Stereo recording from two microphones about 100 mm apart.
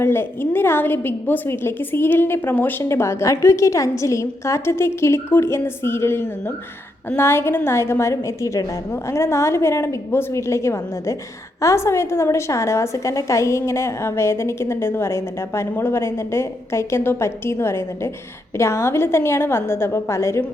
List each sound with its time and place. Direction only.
0.0 s a woman's voice: 20° left (ahead or behind)